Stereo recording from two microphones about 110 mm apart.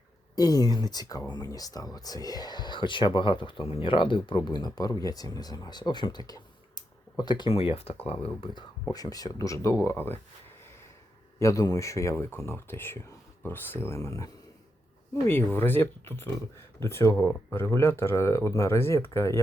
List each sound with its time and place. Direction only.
0.3 s speech: 35° left (ahead or behind)
7.5 s speech: 60° left (ahead or behind)
8.9 s speech: 35° left (ahead or behind); by 10.2 s 20° left (ahead or behind)
11.3 s speech: 30° left (ahead or behind)